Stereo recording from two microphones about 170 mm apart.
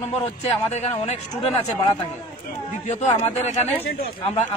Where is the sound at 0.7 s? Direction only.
40° left (ahead or behind).